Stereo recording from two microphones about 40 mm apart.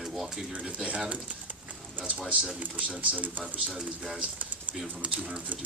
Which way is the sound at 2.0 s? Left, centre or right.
Right.